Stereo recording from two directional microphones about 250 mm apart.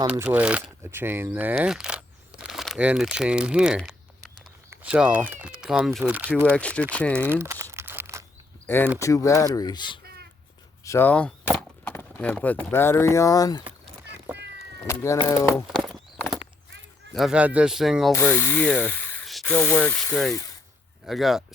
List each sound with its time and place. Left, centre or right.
0.0 s speech: centre
6.3 s speech: centre
7.2 s crumpling: centre
8.6 s speech: centre
10.0 s a sound: right
10.8 s speech: centre
14.8 s speech: centre
15.6 s clip-clop: centre
17.1 s speech: centre